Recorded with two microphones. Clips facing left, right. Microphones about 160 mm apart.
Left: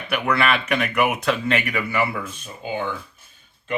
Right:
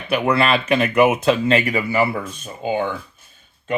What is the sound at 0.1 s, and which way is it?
Speech, 25° right (ahead or behind).